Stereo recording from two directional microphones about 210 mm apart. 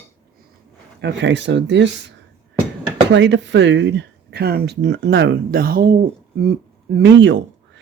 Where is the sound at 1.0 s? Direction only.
55° right (ahead or behind).